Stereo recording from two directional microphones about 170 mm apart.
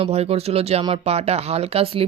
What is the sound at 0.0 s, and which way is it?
Speech, 35° right (ahead or behind).